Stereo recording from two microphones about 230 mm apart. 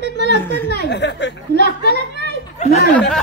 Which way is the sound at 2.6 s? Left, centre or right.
Left.